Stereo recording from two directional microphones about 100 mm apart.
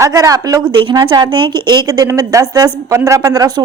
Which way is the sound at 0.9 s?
45° right (ahead or behind).